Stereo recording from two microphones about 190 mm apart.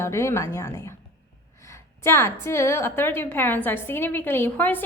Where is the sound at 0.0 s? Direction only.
15° left (ahead or behind).